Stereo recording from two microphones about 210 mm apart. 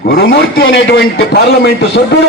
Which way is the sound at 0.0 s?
45° left (ahead or behind).